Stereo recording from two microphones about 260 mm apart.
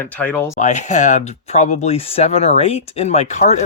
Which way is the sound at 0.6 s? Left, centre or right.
Left.